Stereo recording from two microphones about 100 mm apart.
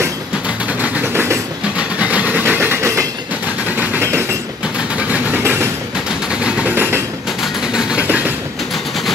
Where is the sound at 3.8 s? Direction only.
20° right (ahead or behind).